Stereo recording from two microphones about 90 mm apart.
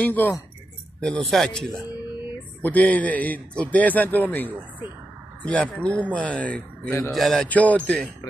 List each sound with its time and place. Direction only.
0.0 s speech: 20° left (ahead or behind)
1.0 s a man's voice: 5° left (ahead or behind)
2.6 s a man's voice: 15° left (ahead or behind)
7.1 s a man's voice: centre (ahead or behind)
7.4 s a man's voice: 20° left (ahead or behind)